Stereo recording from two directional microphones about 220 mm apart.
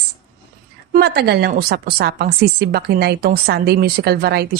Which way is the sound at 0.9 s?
45° right (ahead or behind).